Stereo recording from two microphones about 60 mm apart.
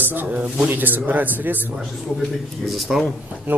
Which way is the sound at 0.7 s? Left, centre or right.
Right.